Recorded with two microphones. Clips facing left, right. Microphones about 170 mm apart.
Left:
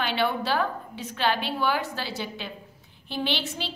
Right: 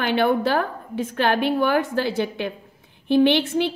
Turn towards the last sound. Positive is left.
turn(degrees=-55)  # may be behind; listen again after turning